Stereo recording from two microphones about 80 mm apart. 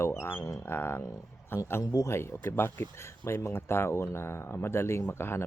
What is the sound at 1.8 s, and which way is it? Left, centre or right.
Speech, left.